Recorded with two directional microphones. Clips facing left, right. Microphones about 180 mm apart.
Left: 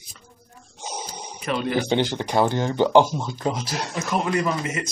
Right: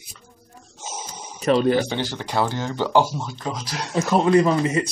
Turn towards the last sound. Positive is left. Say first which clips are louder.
# right 7 dB
turn(degrees=-30)  # may be behind; listen again after turning